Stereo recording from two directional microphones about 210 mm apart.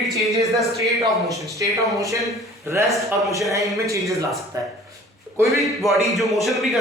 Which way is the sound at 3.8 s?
15° right (ahead or behind).